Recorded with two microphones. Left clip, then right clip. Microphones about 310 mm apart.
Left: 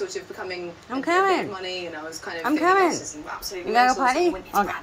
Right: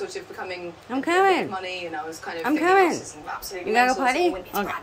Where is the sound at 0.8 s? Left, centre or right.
Centre.